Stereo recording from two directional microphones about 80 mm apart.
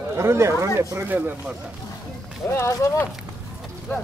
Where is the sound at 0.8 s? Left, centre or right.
Right.